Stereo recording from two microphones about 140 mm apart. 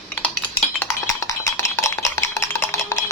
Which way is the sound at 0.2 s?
10° left (ahead or behind).